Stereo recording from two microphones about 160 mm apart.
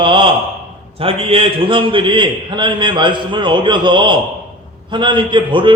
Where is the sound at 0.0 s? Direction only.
30° right (ahead or behind).